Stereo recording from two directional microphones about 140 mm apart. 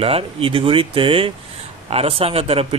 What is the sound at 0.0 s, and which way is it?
A man's voice, 40° right (ahead or behind).